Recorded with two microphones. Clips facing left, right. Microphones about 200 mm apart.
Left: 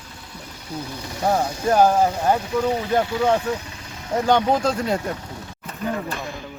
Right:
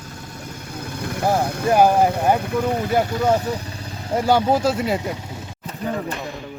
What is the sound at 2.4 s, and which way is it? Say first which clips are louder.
Speech: even; 55° right (ahead or behind).